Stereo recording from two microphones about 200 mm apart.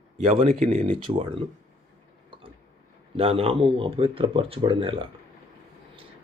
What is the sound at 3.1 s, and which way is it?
Speech, 30° right (ahead or behind).